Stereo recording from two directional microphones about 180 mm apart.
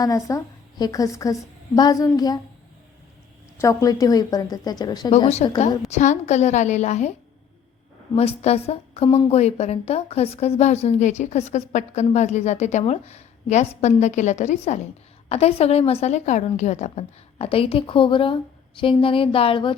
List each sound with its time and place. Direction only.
0.0 s a woman's voice: 20° left (ahead or behind)
3.6 s a woman's voice: 20° left (ahead or behind)
5.1 s a woman's voice: 35° left (ahead or behind)
8.1 s a woman's voice: 35° left (ahead or behind)